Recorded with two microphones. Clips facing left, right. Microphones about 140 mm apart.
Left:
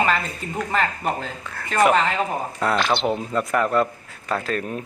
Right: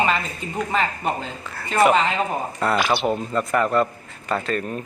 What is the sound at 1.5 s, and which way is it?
Speech, 5° right (ahead or behind).